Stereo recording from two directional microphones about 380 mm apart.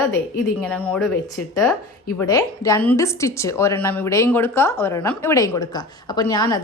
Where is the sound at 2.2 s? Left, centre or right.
Centre.